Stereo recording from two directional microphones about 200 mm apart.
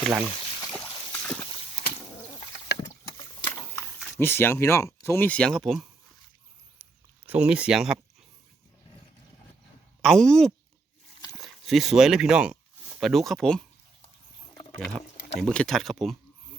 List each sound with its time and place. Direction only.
0.0 s speech: 5° right (ahead or behind)
0.7 s a sound: 5° left (ahead or behind)
3.5 s vehicle: 10° left (ahead or behind)
5.0 s speech: 10° left (ahead or behind)
7.3 s speech: 5° right (ahead or behind)
10.0 s speech: centre (ahead or behind)
14.8 s speech: centre (ahead or behind)